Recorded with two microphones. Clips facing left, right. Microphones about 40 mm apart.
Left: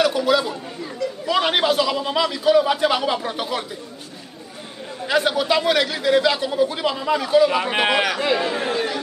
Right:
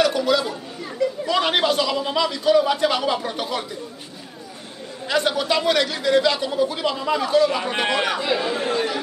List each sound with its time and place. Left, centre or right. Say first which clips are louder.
0.0 s chatter: left 1 dB; centre
1.2 s a man's voice: left 2 dB; centre
5.0 s speech: left 2 dB; centre